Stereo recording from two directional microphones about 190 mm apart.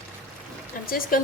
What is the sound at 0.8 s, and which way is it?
Speech, 50° left (ahead or behind).